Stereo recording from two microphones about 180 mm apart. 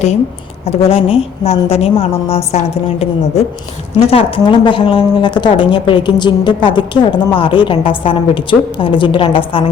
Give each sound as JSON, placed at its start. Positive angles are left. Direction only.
{"t": 0.7, "sound": "a woman's voice", "side_deg": 35}
{"t": 4.1, "sound": "a woman's voice", "side_deg": 30}